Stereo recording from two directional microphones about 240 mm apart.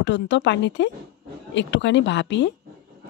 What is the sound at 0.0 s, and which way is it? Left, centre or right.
Speech, left.